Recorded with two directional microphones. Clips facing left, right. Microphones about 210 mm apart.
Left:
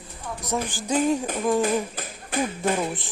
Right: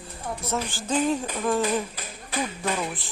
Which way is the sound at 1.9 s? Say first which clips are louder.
Left 3 dB; 50° left (ahead or behind).